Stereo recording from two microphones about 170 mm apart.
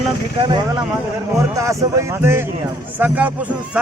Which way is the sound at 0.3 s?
30° right (ahead or behind).